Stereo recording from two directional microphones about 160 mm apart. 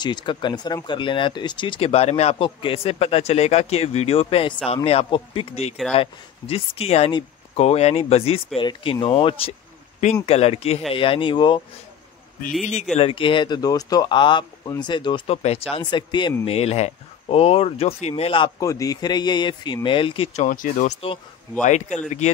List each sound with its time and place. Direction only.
0.0 s speech: 30° left (ahead or behind)
12.9 s speech: 35° left (ahead or behind)
15.3 s speech: 40° left (ahead or behind)
15.7 s speech: 30° left (ahead or behind)
20.4 s speech: 55° left (ahead or behind)